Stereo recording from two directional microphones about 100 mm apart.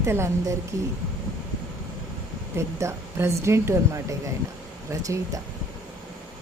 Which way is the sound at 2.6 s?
30° right (ahead or behind).